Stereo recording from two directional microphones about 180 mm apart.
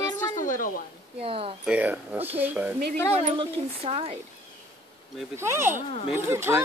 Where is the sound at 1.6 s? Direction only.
5° right (ahead or behind).